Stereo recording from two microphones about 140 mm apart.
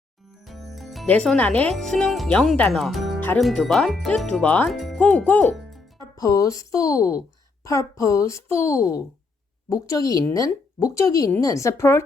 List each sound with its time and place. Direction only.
0.4 s music: centre (ahead or behind)
1.0 s speech: 5° left (ahead or behind)
3.2 s music: 10° left (ahead or behind)
3.4 s speech: centre (ahead or behind)
6.1 s speech: 25° left (ahead or behind)